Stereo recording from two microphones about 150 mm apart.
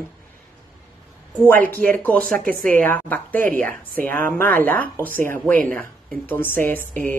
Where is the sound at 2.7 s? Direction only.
10° left (ahead or behind).